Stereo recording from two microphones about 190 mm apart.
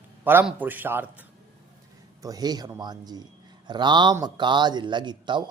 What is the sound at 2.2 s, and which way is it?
A man's voice, 20° right (ahead or behind).